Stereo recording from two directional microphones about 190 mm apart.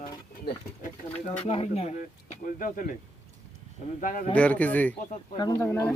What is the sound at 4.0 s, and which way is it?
Speech, 45° left (ahead or behind).